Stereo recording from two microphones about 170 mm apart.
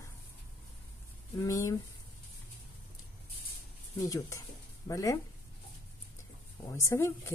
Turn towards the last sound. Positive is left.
turn(degrees=15)  # may be behind; listen again after turning